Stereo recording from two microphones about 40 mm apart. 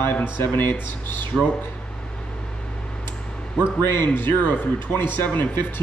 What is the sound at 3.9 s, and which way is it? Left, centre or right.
Speech, left.